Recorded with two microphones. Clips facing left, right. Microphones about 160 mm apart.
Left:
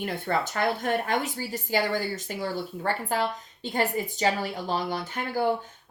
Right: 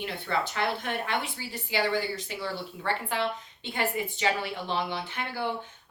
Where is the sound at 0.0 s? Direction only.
45° left (ahead or behind).